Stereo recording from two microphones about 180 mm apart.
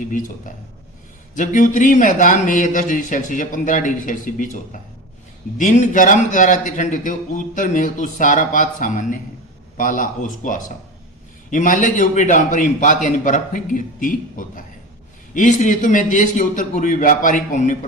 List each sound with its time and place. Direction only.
0.0 s a man's voice: 45° left (ahead or behind)